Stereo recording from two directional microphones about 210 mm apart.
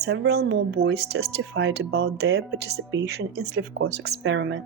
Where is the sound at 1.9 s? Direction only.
50° right (ahead or behind).